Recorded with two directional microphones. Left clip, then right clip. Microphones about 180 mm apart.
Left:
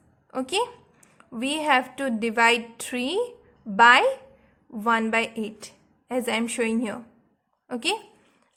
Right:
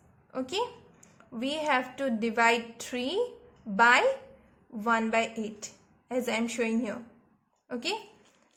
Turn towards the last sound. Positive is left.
turn(degrees=30)  # may be behind; listen again after turning